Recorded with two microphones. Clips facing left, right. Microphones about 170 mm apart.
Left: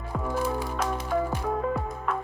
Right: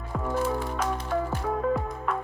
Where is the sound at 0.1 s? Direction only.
Centre (ahead or behind).